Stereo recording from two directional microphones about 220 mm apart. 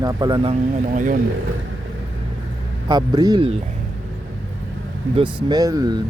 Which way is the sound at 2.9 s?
20° right (ahead or behind).